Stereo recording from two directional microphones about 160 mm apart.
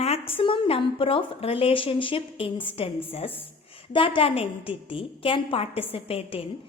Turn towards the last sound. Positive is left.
turn(degrees=35)  # may be behind; listen again after turning